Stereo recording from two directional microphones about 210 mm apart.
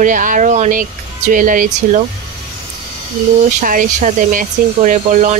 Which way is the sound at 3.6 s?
40° right (ahead or behind).